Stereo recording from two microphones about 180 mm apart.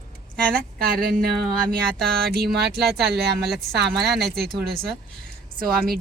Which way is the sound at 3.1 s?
65° right (ahead or behind).